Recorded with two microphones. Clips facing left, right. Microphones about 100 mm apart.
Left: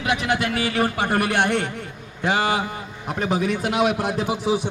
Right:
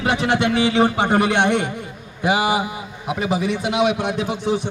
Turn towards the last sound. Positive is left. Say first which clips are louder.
# even
turn(degrees=5)  # may be behind; listen again after turning